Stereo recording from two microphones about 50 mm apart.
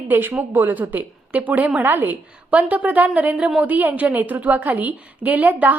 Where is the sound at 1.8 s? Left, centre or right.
Right.